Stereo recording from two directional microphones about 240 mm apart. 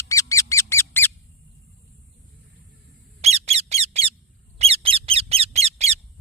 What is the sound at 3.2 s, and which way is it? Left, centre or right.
Bird, right.